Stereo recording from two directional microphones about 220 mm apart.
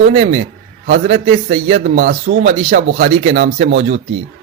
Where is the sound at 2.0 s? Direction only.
50° right (ahead or behind).